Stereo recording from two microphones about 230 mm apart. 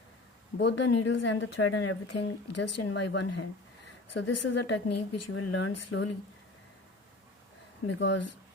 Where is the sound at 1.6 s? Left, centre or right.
Left.